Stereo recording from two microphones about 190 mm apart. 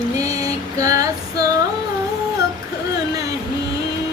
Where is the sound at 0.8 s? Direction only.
20° right (ahead or behind).